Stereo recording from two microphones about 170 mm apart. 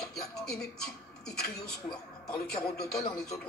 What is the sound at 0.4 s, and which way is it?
Speech, 5° left (ahead or behind).